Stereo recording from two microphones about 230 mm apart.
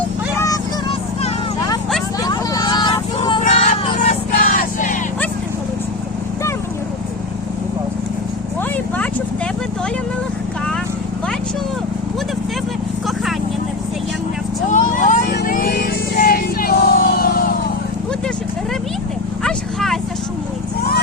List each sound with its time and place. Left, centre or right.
0.3 s a sound: centre
2.2 s vehicle: centre; by 4.9 s left
14.7 s vehicle: left
19.5 s clip-clop: centre